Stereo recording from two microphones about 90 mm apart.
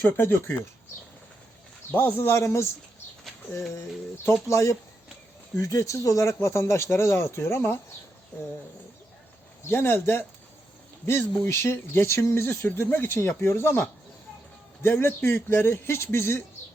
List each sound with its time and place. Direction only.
0.2 s speech: 30° left (ahead or behind)
1.9 s speech: 20° left (ahead or behind)
4.4 s speech: 35° left (ahead or behind)
9.6 s speech: 30° left (ahead or behind)